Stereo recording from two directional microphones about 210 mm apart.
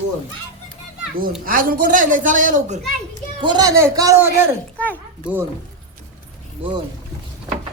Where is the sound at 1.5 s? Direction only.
40° right (ahead or behind).